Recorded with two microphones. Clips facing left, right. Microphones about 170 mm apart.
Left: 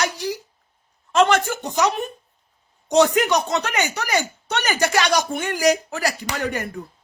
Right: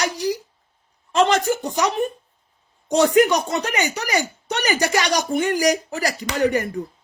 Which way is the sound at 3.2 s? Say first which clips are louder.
Even; 10° right (ahead or behind).